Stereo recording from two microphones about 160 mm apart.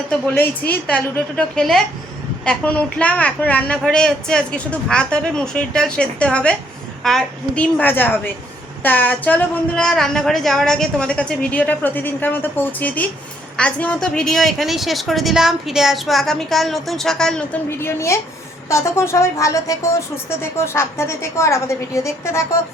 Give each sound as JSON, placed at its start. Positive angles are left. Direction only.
{"t": 0.1, "sound": "a woman's voice", "side_deg": 10}